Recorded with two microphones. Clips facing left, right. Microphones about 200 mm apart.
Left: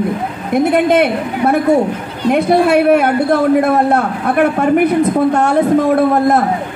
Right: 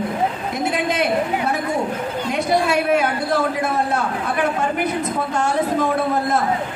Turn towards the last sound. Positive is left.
turn(degrees=60)  # may be behind; listen again after turning